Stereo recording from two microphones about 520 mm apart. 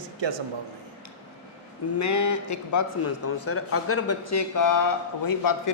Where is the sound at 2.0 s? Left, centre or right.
Left.